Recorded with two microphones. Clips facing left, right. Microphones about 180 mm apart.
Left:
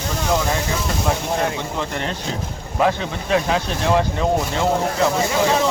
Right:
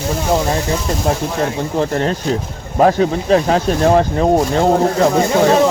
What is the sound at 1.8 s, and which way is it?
Speech, 40° right (ahead or behind).